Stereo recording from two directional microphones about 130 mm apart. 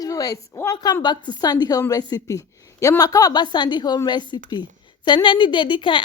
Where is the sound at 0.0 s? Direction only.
25° left (ahead or behind).